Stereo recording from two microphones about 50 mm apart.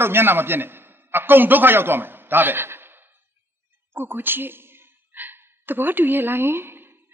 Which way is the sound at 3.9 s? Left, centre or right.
Right.